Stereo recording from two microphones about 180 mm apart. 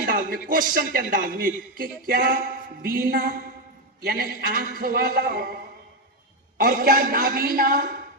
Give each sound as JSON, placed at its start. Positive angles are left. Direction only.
{"t": 0.0, "sound": "a man's voice", "side_deg": -55}
{"t": 6.6, "sound": "speech", "side_deg": -50}